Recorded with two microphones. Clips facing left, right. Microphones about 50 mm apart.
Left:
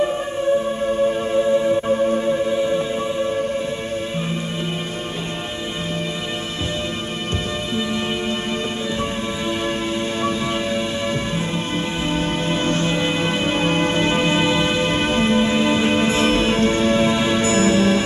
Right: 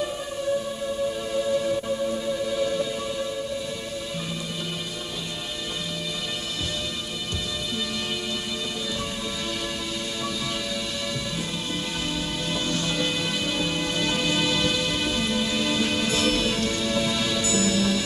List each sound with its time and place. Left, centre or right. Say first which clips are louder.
0.8 s music: left 8 dB; left
12.1 s music: left 9 dB; left